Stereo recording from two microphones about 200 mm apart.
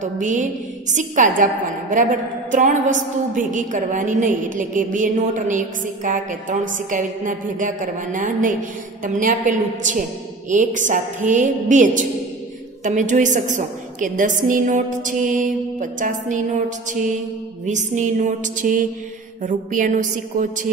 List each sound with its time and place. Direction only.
0.0 s a woman's voice: 40° right (ahead or behind)